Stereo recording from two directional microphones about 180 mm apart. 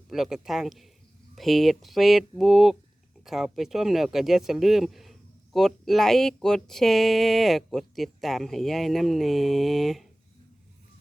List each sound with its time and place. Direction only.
0.1 s speech: centre (ahead or behind)